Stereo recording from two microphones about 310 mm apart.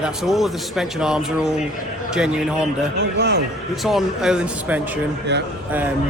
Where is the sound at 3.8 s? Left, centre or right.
Centre.